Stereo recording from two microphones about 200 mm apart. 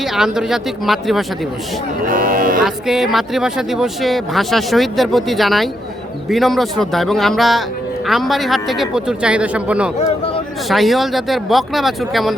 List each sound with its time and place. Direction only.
0.0 s speech: centre (ahead or behind)
2.0 s speech: 45° right (ahead or behind)
2.6 s speech: centre (ahead or behind)